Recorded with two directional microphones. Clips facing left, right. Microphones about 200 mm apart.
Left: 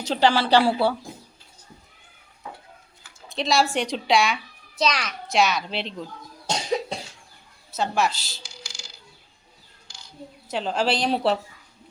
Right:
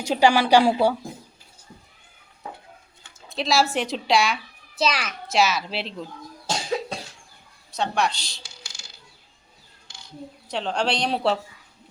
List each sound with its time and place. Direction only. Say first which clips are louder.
0.0 s a woman's voice: right 2 dB; 10° right (ahead or behind)
3.2 s a child's voice: even; centre (ahead or behind)
6.5 s cough: left 1 dB; 15° left (ahead or behind)
7.7 s speech: left 1 dB; centre (ahead or behind)
10.5 s speech: left 1 dB; 5° left (ahead or behind)